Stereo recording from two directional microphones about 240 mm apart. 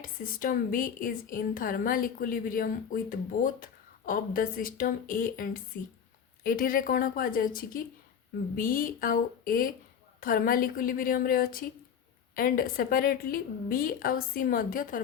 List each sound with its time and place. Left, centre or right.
0.0 s a woman's voice: left